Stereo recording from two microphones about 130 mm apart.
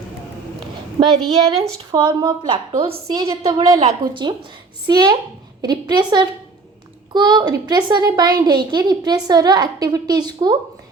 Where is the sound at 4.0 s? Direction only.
35° right (ahead or behind).